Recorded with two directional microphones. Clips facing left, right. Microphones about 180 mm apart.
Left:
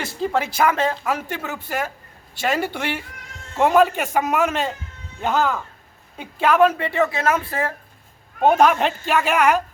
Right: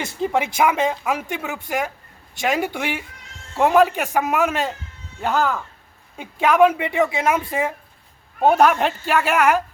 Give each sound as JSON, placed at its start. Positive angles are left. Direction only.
{"t": 0.0, "sound": "speech", "side_deg": -15}